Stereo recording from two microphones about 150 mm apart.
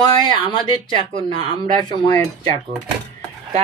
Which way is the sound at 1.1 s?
30° left (ahead or behind).